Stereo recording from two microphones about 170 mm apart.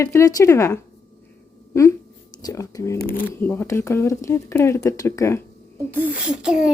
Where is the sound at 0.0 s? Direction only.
15° left (ahead or behind).